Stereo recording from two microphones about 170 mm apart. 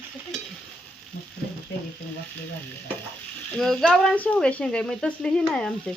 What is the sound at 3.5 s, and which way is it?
Speech, 5° left (ahead or behind).